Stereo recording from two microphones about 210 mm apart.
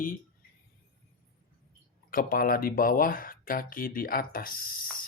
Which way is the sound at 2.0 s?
45° left (ahead or behind).